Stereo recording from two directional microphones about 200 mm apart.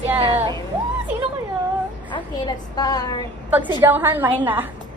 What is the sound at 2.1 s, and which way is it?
A woman's voice, 20° left (ahead or behind).